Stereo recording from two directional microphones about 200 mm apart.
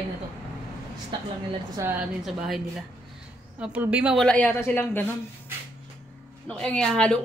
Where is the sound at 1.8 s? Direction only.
15° right (ahead or behind).